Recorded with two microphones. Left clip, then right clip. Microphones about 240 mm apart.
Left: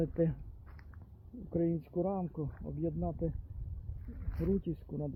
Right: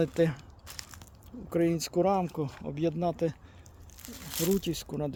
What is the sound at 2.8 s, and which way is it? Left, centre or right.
Speech, right.